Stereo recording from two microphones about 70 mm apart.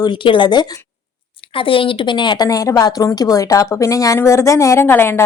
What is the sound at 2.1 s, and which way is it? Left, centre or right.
Speech, left.